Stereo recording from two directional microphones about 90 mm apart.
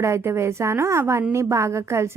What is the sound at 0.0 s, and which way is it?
A woman's voice, 30° right (ahead or behind).